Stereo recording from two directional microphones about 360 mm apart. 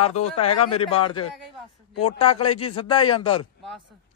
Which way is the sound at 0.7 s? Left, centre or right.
Centre.